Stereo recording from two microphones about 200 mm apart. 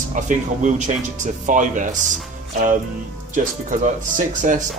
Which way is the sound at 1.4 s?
40° right (ahead or behind).